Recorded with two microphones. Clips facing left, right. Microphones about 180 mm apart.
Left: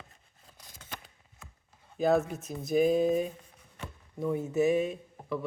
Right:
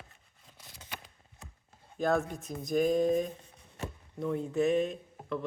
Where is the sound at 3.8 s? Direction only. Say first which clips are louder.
Right 4 dB; 40° right (ahead or behind).